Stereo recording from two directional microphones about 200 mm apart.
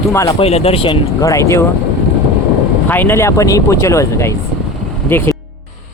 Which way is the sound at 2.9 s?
10° left (ahead or behind).